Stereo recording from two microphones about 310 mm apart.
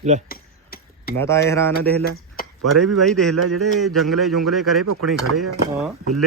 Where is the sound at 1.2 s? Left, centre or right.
Centre.